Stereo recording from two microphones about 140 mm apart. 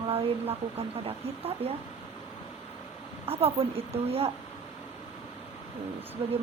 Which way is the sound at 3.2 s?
45° right (ahead or behind).